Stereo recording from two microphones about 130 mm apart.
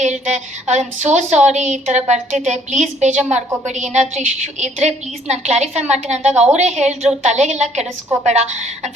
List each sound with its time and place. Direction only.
0.0 s a woman's voice: 65° right (ahead or behind)